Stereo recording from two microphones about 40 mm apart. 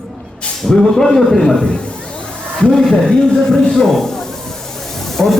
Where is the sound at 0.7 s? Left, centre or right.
Centre.